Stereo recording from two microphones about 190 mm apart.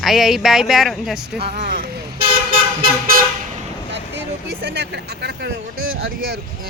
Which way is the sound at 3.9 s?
70° right (ahead or behind).